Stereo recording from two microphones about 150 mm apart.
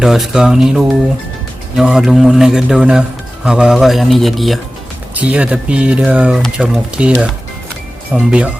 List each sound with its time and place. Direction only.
0.0 s speech: centre (ahead or behind)